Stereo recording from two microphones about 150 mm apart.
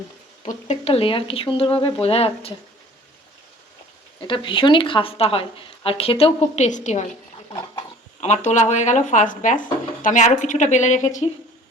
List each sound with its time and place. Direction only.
0.4 s a woman's voice: 45° left (ahead or behind)
4.3 s a woman's voice: 35° left (ahead or behind); by 7.1 s 55° left (ahead or behind)
8.2 s speech: 50° left (ahead or behind)